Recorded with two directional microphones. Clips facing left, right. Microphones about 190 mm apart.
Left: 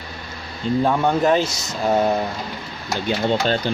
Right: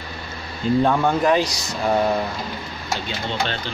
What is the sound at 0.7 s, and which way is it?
Speech, 10° right (ahead or behind).